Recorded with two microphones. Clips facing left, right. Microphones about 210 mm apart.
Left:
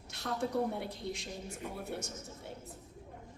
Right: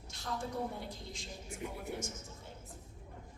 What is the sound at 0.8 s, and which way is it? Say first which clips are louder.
Speech: left 6 dB; 65° left (ahead or behind).